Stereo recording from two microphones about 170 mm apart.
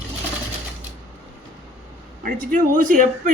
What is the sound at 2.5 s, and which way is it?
Speech, 50° right (ahead or behind).